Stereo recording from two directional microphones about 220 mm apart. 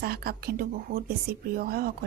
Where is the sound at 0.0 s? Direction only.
45° right (ahead or behind).